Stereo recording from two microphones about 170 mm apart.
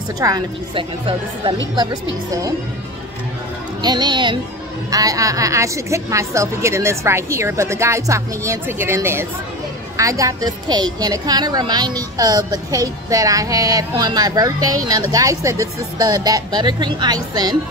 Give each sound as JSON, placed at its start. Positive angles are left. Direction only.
{"t": 0.2, "sound": "speech", "side_deg": -25}
{"t": 3.8, "sound": "a woman's voice", "side_deg": -25}